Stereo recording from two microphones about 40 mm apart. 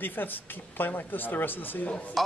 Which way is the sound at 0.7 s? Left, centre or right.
Left.